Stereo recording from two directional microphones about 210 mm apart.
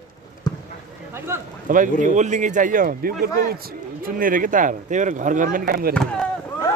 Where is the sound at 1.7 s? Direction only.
40° right (ahead or behind).